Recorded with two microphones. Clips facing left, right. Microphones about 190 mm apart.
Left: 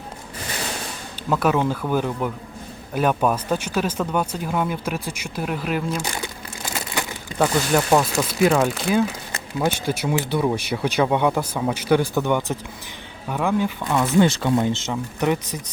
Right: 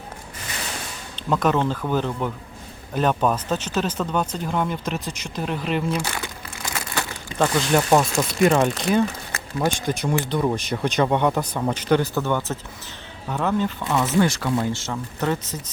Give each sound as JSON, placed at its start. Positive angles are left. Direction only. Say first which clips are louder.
{"t": 1.1, "sound": "speech", "louder": "even", "side_deg": 10}
{"t": 6.9, "sound": "a sound", "louder": "left 1 dB", "side_deg": 5}
{"t": 7.9, "sound": "speech", "louder": "even", "side_deg": -10}
{"t": 8.2, "sound": "speech", "louder": "even", "side_deg": 0}
{"t": 14.2, "sound": "speech", "louder": "left 5 dB", "side_deg": 25}